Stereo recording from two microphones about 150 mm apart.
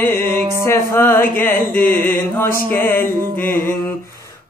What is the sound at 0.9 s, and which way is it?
Mantra, 15° left (ahead or behind).